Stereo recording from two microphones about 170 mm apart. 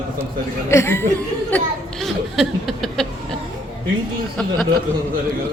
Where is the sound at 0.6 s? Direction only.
15° left (ahead or behind).